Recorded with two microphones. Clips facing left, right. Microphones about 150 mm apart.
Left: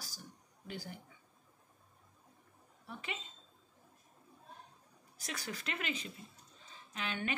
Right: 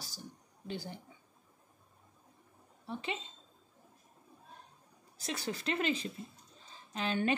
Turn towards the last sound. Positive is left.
turn(degrees=-35)  # may be behind; listen again after turning